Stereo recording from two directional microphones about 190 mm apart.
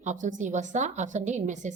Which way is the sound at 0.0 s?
40° right (ahead or behind).